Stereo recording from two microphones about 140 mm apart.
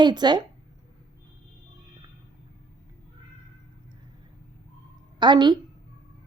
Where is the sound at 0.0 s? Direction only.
30° right (ahead or behind).